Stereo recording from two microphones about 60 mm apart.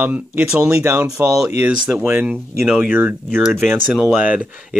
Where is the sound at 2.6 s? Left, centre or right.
Centre.